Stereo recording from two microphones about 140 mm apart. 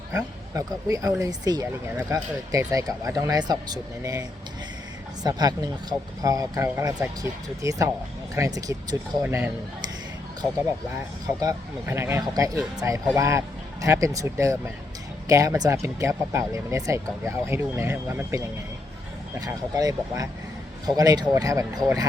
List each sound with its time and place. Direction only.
0.5 s speech: 25° right (ahead or behind)
9.2 s speech: 15° right (ahead or behind)
11.3 s speech: 20° right (ahead or behind)